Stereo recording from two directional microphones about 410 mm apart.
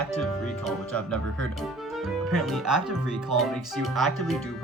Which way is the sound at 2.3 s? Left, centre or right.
Centre.